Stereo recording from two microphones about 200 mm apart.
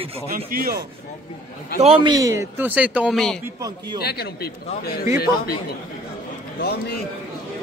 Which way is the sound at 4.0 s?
50° left (ahead or behind).